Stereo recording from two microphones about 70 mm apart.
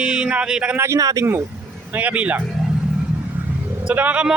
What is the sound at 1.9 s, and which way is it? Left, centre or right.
Speech, right.